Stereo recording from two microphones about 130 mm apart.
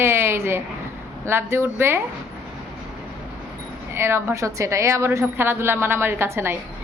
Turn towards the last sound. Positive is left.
turn(degrees=-20)  # may be behind; listen again after turning